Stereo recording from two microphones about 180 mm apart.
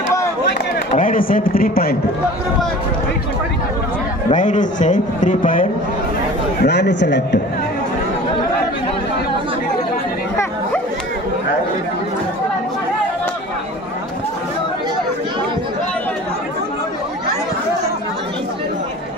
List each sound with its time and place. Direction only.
0.9 s a man's voice: 50° left (ahead or behind)
4.3 s a man's voice: 45° left (ahead or behind)
6.6 s speech: 70° left (ahead or behind)